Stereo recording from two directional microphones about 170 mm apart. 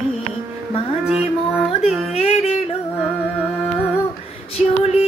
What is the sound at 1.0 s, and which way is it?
Music, 5° right (ahead or behind).